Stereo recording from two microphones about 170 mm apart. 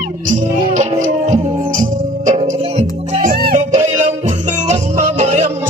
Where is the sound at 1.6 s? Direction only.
50° right (ahead or behind).